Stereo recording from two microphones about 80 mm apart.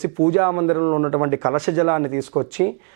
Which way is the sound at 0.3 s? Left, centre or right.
Centre.